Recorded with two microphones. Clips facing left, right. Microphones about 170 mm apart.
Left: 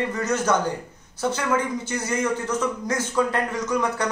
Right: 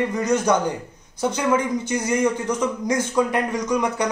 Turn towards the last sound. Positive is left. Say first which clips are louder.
# right 2 dB
turn(degrees=-15)  # may be behind; listen again after turning